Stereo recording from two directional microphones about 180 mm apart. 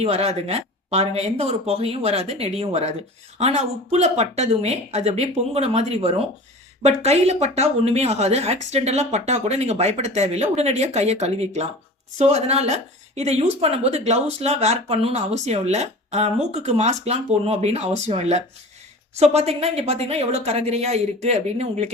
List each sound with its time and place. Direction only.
0.0 s a woman's voice: 35° right (ahead or behind)